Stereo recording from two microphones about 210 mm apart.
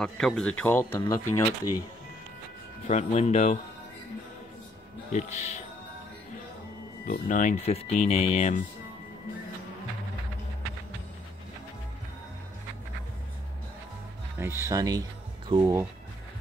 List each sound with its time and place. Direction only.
0.0 s speech: 5° left (ahead or behind)
2.9 s speech: 35° left (ahead or behind)
5.1 s speech: 35° left (ahead or behind)
7.1 s speech: 35° left (ahead or behind)
14.4 s speech: 10° right (ahead or behind)